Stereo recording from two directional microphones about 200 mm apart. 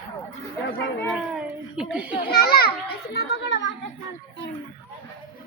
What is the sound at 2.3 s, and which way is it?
Children playing, 50° left (ahead or behind).